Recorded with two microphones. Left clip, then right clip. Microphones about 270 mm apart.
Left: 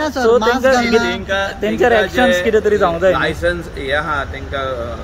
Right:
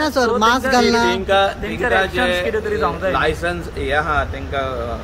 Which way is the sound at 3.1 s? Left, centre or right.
Centre.